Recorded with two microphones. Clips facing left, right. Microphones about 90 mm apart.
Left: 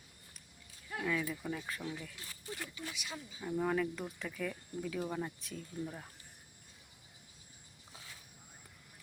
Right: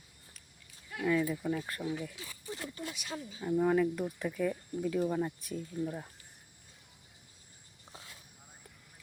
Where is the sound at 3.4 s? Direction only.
10° right (ahead or behind).